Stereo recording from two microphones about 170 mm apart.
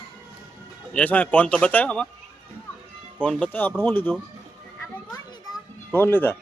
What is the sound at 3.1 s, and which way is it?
Speech, 5° left (ahead or behind).